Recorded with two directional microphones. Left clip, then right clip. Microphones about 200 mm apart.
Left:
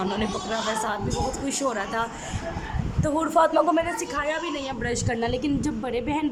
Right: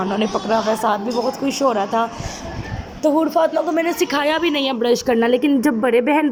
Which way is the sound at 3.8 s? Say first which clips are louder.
Right 9 dB; 20° right (ahead or behind).